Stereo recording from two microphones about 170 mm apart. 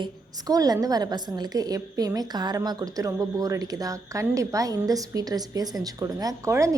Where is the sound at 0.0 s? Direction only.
20° right (ahead or behind).